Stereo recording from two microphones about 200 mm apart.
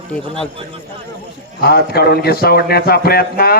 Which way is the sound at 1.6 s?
50° left (ahead or behind).